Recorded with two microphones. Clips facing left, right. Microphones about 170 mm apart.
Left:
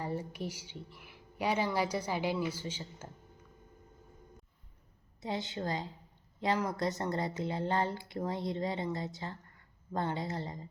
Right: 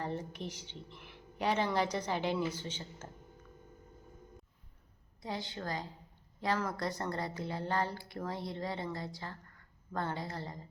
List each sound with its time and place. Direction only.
0.0 s a woman's voice: 10° left (ahead or behind)
5.2 s speech: 20° left (ahead or behind)